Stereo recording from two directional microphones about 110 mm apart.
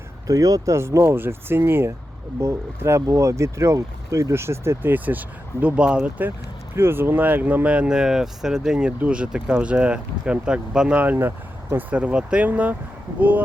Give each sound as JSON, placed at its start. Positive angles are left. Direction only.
{"t": 0.3, "sound": "speech", "side_deg": -30}